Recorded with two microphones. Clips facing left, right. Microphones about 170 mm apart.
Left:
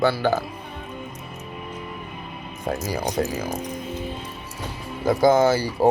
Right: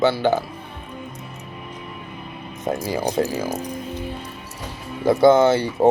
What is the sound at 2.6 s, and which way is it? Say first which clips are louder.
Speech: right 3 dB; 25° right (ahead or behind).